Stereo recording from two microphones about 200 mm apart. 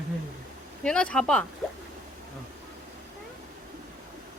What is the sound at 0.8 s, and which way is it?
Speech, 5° left (ahead or behind).